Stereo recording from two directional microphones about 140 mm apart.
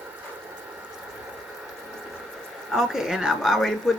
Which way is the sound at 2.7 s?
5° right (ahead or behind).